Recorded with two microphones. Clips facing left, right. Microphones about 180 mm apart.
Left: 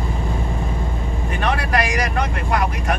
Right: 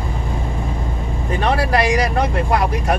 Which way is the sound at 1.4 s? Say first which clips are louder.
Right 4 dB; 30° right (ahead or behind).